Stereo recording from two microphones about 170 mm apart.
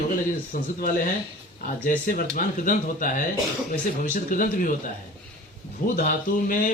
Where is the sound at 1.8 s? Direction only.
50° left (ahead or behind).